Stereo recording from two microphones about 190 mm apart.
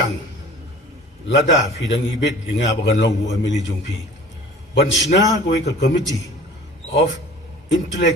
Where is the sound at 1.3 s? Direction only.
65° left (ahead or behind).